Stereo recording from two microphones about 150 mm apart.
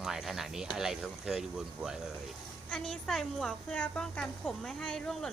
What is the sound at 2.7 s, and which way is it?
Speech, centre (ahead or behind).